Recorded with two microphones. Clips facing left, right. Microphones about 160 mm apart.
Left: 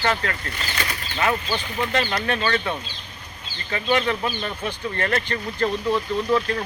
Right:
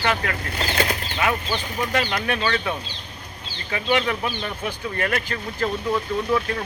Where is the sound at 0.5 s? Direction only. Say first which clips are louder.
Right 6 dB; 60° right (ahead or behind).